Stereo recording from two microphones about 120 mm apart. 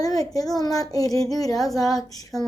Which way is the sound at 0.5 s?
30° left (ahead or behind).